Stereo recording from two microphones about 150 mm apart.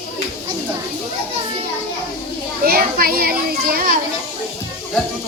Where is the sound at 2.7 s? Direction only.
80° right.